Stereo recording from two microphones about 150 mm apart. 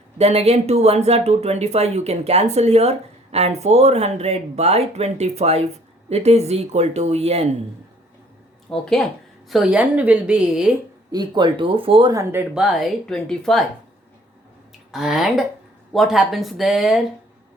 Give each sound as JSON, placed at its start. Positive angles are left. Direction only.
{"t": 0.2, "sound": "speech", "side_deg": -45}
{"t": 8.7, "sound": "a woman's voice", "side_deg": 5}
{"t": 11.1, "sound": "speech", "side_deg": -30}
{"t": 12.1, "sound": "a woman's voice", "side_deg": -15}
{"t": 12.6, "sound": "speech", "side_deg": 0}
{"t": 14.9, "sound": "speech", "side_deg": -5}